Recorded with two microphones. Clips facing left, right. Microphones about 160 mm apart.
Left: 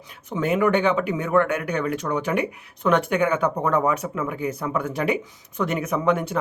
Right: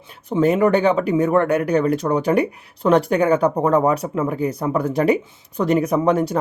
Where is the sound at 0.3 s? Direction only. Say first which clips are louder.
Right 5 dB; 35° right (ahead or behind).